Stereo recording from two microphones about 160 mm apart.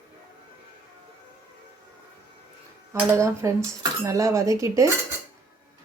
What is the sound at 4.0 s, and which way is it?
Cutlery, 20° right (ahead or behind).